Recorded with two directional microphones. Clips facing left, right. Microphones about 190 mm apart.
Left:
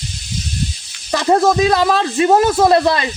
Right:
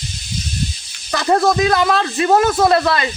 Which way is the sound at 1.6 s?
25° left (ahead or behind).